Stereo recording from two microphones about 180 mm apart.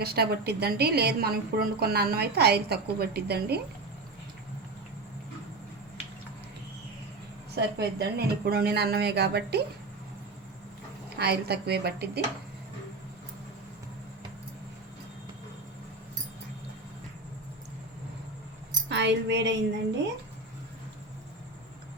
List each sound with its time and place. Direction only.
0.0 s a woman's voice: 60° right (ahead or behind)
7.5 s a woman's voice: 65° right (ahead or behind)
11.2 s a woman's voice: 65° right (ahead or behind)
18.9 s speech: 75° right (ahead or behind)